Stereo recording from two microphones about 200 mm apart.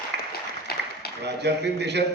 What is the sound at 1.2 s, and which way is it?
Speech, 55° right (ahead or behind).